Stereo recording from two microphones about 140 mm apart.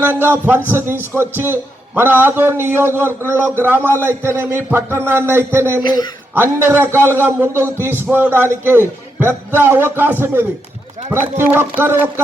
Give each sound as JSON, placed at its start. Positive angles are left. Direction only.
{"t": 0.0, "sound": "a man's voice", "side_deg": -15}
{"t": 5.8, "sound": "a man's voice", "side_deg": 30}
{"t": 6.3, "sound": "a man's voice", "side_deg": -15}